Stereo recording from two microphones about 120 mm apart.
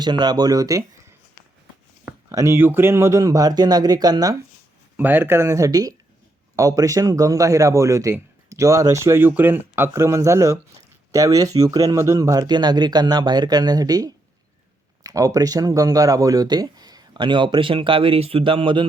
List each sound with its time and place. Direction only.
0.0 s speech: 35° right (ahead or behind)
2.3 s a man's voice: 25° right (ahead or behind)
4.9 s a man's voice: 15° right (ahead or behind); by 18.9 s 45° right (ahead or behind)